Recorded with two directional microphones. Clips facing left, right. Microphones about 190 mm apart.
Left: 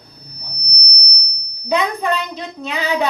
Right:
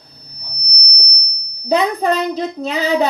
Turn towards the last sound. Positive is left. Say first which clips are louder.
# right 4 dB
turn(degrees=-40)  # may be behind; listen again after turning